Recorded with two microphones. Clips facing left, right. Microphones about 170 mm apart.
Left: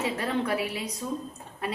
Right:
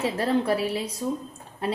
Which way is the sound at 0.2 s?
30° right (ahead or behind).